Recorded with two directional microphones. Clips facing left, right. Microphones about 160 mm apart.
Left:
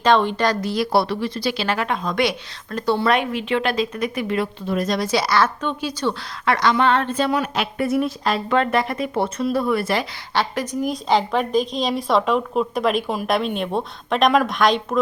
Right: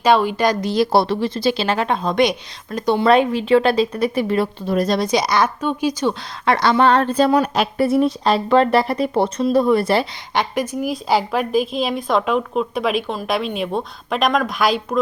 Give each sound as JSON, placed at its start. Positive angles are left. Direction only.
{"t": 0.0, "sound": "speech", "side_deg": -10}
{"t": 2.7, "sound": "a woman's voice", "side_deg": -15}
{"t": 3.1, "sound": "speech", "side_deg": -30}
{"t": 5.0, "sound": "a woman's voice", "side_deg": -15}
{"t": 6.4, "sound": "speech", "side_deg": -30}
{"t": 10.3, "sound": "a woman's voice", "side_deg": -10}